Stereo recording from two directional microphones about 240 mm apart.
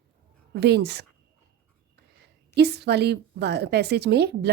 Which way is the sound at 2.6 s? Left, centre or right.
Right.